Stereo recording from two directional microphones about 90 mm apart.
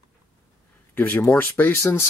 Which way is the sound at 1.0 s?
30° left (ahead or behind).